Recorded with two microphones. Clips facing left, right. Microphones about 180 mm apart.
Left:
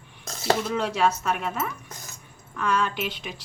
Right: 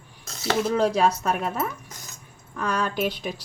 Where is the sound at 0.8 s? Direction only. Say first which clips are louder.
Right 3 dB; 40° right (ahead or behind).